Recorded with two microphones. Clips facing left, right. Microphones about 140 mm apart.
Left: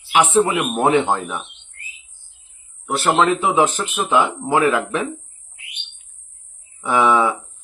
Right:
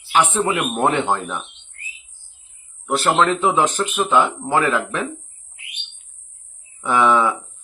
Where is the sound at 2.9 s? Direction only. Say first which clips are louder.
Even; centre (ahead or behind).